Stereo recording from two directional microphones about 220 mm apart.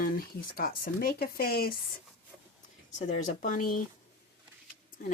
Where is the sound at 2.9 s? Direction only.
30° left (ahead or behind).